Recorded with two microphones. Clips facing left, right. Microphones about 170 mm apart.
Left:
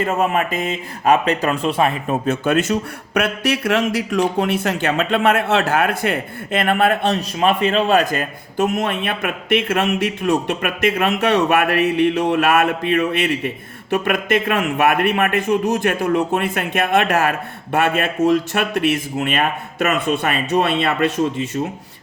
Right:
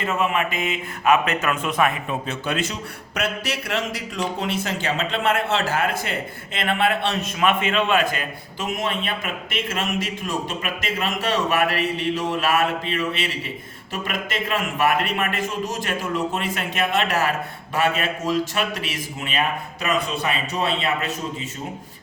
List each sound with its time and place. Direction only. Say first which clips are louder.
0.0 s speech: left 4 dB; 40° left (ahead or behind)
2.0 s speech: left 8 dB; 50° left (ahead or behind); by 20.9 s 65° left (ahead or behind)